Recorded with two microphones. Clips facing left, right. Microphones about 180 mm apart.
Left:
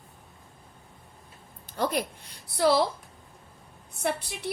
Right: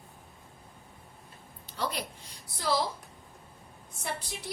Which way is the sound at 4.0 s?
65° left (ahead or behind).